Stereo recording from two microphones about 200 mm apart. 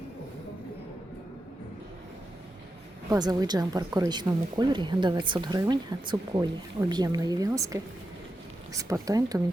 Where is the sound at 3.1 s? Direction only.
20° right (ahead or behind).